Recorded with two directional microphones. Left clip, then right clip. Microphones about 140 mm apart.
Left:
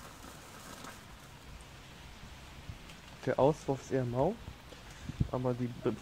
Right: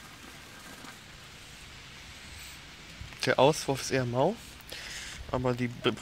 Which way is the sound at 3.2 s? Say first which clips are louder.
Right 5 dB; 30° right (ahead or behind).